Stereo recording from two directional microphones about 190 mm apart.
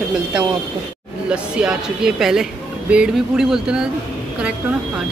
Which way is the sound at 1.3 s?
5° right (ahead or behind).